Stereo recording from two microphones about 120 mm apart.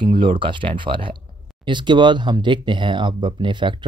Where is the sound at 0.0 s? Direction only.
45° right (ahead or behind).